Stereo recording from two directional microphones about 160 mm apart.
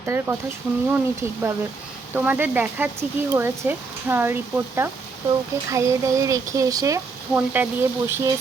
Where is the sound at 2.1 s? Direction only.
10° right (ahead or behind).